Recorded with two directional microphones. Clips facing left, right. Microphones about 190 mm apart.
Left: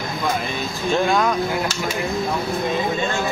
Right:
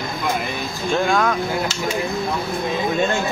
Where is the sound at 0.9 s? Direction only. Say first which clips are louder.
Even; centre (ahead or behind).